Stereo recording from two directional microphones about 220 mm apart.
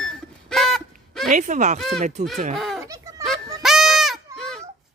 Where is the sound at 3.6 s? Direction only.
Centre (ahead or behind).